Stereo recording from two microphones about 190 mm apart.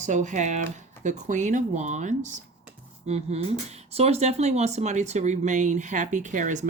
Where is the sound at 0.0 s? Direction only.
40° right (ahead or behind).